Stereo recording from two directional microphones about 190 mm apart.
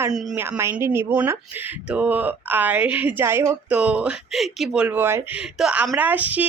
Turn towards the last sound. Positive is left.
turn(degrees=-10)  # may be behind; listen again after turning